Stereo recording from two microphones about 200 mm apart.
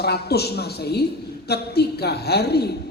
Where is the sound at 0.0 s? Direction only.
55° left (ahead or behind).